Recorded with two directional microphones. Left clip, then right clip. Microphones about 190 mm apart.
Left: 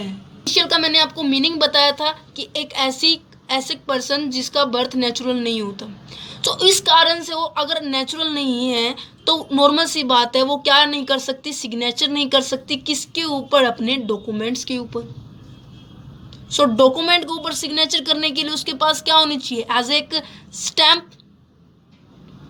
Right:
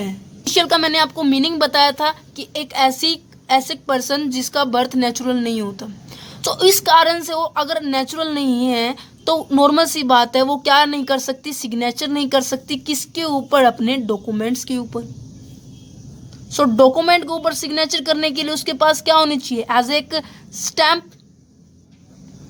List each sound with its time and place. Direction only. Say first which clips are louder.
0.4 s a woman's voice: right 1 dB; 20° right (ahead or behind)
16.7 s a woman's voice: right 4 dB; 15° right (ahead or behind)